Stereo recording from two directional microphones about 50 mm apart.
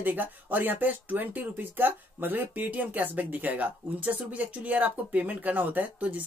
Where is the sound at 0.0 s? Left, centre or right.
Right.